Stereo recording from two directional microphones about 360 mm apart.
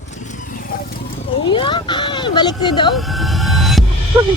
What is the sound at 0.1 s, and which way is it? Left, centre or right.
Vehicle, centre.